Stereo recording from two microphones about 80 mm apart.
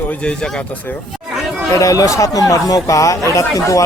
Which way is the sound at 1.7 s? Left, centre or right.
Left.